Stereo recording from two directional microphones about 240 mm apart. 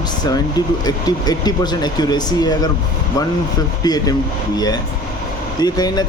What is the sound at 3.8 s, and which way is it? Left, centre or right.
Speech, centre.